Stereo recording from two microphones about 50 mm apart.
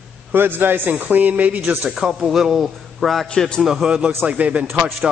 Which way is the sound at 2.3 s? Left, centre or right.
Centre.